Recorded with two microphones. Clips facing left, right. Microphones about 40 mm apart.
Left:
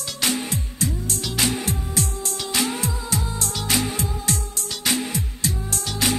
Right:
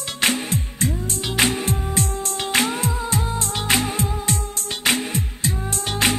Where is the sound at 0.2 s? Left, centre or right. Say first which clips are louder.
Right 3 dB; right.